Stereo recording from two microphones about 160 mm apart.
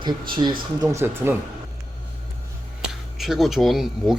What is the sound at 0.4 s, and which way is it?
Speech, 25° right (ahead or behind).